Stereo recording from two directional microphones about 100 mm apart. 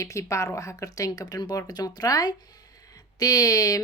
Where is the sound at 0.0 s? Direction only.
30° left (ahead or behind).